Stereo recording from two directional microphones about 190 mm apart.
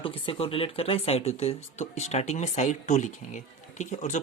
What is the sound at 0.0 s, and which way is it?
Speech, 30° left (ahead or behind).